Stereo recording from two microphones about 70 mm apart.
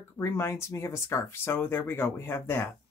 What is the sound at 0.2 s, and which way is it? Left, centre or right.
Speech, left.